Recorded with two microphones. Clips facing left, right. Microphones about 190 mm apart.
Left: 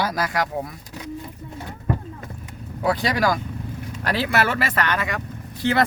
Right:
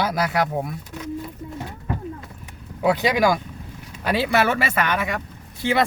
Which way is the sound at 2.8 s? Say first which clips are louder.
Right 3 dB; 15° right (ahead or behind).